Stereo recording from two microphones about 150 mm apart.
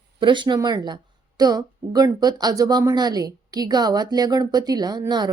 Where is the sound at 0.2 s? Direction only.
30° right (ahead or behind).